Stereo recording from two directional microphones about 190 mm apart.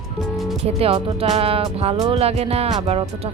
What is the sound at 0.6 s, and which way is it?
Speech, 30° right (ahead or behind).